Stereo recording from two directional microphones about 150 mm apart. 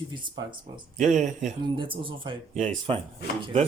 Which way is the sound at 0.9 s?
50° right (ahead or behind).